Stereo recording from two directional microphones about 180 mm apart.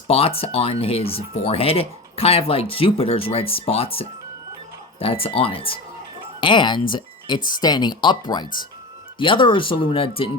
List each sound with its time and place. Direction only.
0.1 s speech: 30° left (ahead or behind)
6.9 s a sound: 25° left (ahead or behind)
7.6 s speech: 25° left (ahead or behind)